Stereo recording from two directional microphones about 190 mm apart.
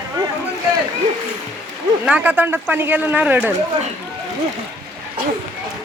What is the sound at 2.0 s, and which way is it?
Speech, 5° right (ahead or behind).